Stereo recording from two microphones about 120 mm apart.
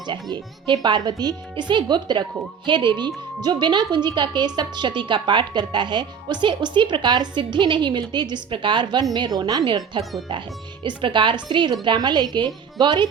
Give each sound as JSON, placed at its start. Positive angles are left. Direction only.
{"t": 0.1, "sound": "a woman's voice", "side_deg": -40}
{"t": 10.0, "sound": "speech", "side_deg": 0}
{"t": 10.8, "sound": "a woman's voice", "side_deg": -45}